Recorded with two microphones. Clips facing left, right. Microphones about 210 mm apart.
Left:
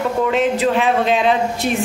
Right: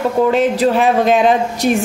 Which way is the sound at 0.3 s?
40° right (ahead or behind).